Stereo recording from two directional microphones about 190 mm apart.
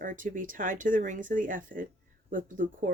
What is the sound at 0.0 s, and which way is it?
Speech, 45° right (ahead or behind).